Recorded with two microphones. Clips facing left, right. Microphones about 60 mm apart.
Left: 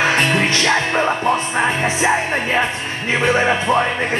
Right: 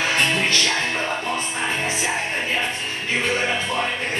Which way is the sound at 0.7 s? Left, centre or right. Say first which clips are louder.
Left 7 dB; left.